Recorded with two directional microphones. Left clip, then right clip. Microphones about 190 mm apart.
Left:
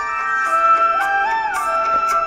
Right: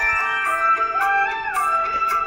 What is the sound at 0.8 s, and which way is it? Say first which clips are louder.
Music: left 3 dB; 40° left (ahead or behind).